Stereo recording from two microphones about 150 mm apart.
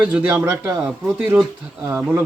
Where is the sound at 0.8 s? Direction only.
5° right (ahead or behind).